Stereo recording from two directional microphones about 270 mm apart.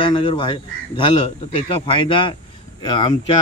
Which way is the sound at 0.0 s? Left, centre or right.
Centre.